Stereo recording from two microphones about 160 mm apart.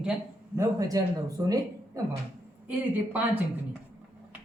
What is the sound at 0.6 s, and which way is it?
Speech, 20° right (ahead or behind).